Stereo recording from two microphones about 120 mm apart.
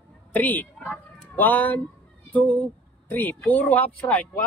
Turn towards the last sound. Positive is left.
turn(degrees=15)  # may be behind; listen again after turning